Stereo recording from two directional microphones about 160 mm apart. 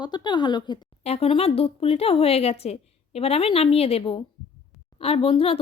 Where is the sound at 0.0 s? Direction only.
25° left (ahead or behind).